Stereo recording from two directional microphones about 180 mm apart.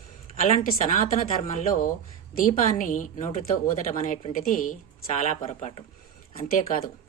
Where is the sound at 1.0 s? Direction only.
40° left (ahead or behind).